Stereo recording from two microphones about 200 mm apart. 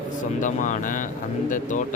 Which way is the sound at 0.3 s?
40° left (ahead or behind).